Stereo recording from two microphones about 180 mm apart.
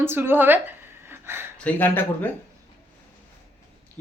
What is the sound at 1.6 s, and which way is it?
Speech, 10° left (ahead or behind).